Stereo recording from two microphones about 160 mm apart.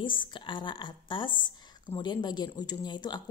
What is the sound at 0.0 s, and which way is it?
Speech, 30° left (ahead or behind).